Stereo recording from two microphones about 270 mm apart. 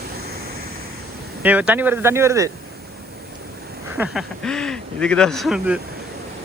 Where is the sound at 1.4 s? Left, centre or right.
Centre.